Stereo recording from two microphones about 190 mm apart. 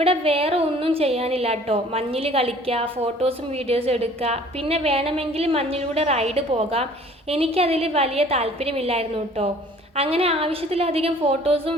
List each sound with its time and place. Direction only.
0.0 s a woman's voice: 30° right (ahead or behind)